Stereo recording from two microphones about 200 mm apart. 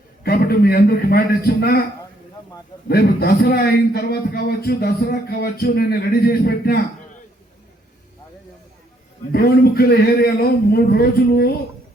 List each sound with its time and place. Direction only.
0.2 s a man's voice: 50° left (ahead or behind)
2.9 s a man's voice: 55° left (ahead or behind)
9.3 s a man's voice: 50° left (ahead or behind)